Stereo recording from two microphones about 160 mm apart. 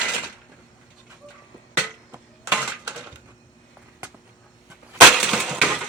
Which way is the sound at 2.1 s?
10° right (ahead or behind).